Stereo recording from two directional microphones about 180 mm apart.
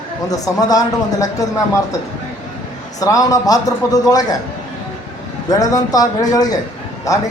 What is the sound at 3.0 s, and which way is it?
Speech, 20° left (ahead or behind).